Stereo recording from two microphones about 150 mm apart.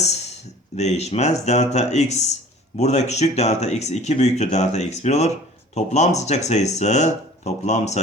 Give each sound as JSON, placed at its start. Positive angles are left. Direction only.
{"t": 0.8, "sound": "speech", "side_deg": 45}